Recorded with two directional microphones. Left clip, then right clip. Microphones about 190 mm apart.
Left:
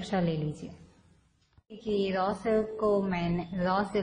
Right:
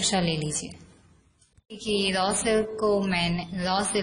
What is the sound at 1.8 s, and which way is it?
A woman's voice, 10° left (ahead or behind).